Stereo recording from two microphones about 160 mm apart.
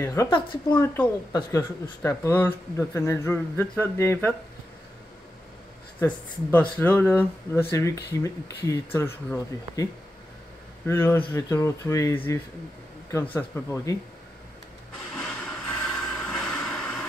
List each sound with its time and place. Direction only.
0.0 s speech: 20° left (ahead or behind)
5.9 s speech: 10° left (ahead or behind)
10.9 s speech: 15° left (ahead or behind)
15.1 s a sound: 5° left (ahead or behind)